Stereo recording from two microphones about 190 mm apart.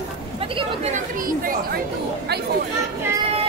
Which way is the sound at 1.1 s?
50° right (ahead or behind).